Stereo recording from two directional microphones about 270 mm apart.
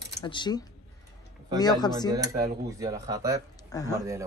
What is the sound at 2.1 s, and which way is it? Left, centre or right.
Speech, centre.